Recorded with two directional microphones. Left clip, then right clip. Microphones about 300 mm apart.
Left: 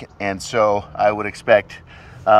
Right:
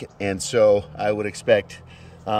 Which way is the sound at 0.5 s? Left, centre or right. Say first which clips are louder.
Even; centre.